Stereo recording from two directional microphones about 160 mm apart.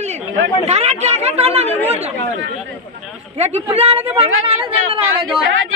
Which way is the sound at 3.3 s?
40° right (ahead or behind).